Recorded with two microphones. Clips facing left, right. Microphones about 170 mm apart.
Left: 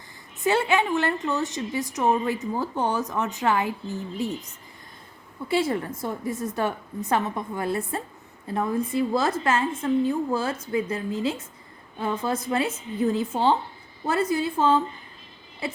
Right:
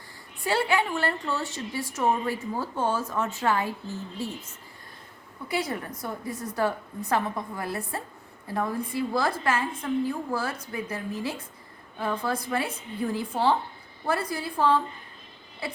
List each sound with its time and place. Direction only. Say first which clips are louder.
0.4 s a woman's voice: left 3 dB; 20° left (ahead or behind)